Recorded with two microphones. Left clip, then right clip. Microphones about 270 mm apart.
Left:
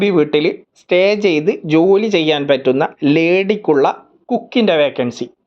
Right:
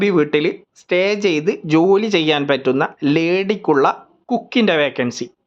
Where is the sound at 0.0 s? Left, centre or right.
Centre.